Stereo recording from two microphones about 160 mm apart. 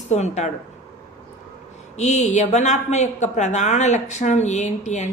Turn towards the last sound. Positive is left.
turn(degrees=45)  # may be behind; listen again after turning